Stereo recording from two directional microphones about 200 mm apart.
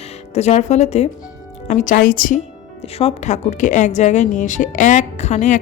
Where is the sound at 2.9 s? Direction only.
30° left (ahead or behind).